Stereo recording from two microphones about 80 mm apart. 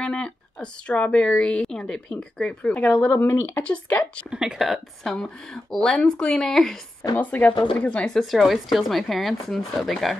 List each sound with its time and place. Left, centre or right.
0.0 s speech: centre
4.3 s speech: centre
7.2 s speech: centre